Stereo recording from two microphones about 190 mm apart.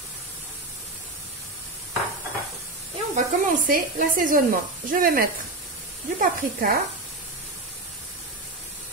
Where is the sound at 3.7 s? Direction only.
45° right (ahead or behind).